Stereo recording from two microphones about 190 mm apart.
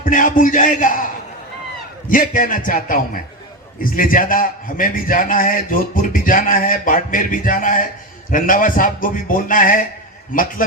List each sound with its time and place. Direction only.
0.0 s a man's voice: 45° left (ahead or behind)
2.0 s a man's voice: 45° left (ahead or behind)